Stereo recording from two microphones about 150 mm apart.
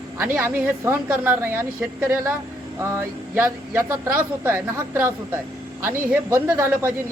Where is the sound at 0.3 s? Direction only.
15° right (ahead or behind).